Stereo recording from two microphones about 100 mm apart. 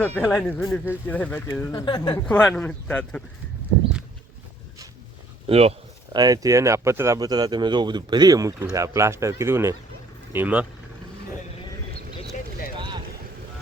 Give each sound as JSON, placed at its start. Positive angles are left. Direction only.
{"t": 0.0, "sound": "speech", "side_deg": 15}
{"t": 1.7, "sound": "speech", "side_deg": 50}
{"t": 2.2, "sound": "speech", "side_deg": 10}
{"t": 5.5, "sound": "speech", "side_deg": -90}
{"t": 6.1, "sound": "speech", "side_deg": -40}
{"t": 7.2, "sound": "speech", "side_deg": -40}
{"t": 10.3, "sound": "speech", "side_deg": -15}
{"t": 12.7, "sound": "boat", "side_deg": -50}